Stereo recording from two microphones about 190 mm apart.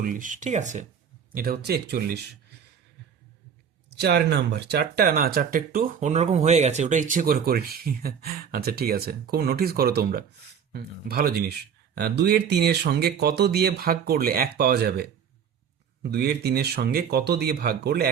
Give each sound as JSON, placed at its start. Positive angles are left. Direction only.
{"t": 0.0, "sound": "speech", "side_deg": -45}
{"t": 1.3, "sound": "speech", "side_deg": -50}
{"t": 3.8, "sound": "speech", "side_deg": -60}